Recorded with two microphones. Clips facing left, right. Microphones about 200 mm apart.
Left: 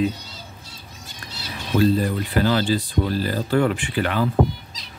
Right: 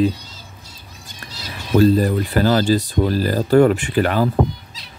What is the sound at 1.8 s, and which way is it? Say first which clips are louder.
Speech: right 5 dB; 40° right (ahead or behind).